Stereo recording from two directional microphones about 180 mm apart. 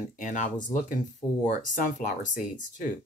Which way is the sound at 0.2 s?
45° left (ahead or behind).